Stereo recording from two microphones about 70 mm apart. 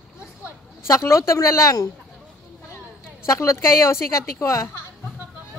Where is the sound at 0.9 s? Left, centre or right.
Left.